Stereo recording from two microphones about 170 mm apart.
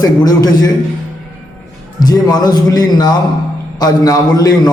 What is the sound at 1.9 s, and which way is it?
A man's voice, 25° left (ahead or behind).